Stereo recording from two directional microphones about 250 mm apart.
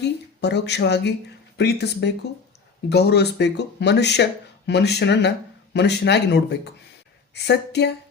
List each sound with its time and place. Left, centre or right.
0.0 s speech: left